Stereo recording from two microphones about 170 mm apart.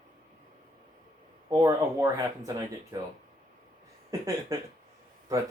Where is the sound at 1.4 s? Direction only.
20° right (ahead or behind).